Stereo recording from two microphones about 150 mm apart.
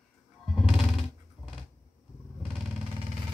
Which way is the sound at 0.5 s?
Centre (ahead or behind).